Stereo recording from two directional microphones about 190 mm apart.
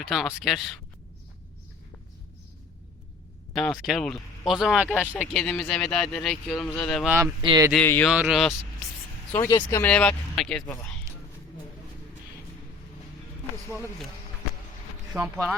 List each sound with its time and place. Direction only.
0.1 s speech: centre (ahead or behind)
3.5 s speech: 5° left (ahead or behind)
7.0 s speech: 10° right (ahead or behind)
7.4 s speech: 20° right (ahead or behind)
7.7 s speech: 10° left (ahead or behind)
8.1 s speech: 5° right (ahead or behind)
9.3 s speech: 15° left (ahead or behind)
9.8 s speech: 5° left (ahead or behind)
15.1 s speech: centre (ahead or behind)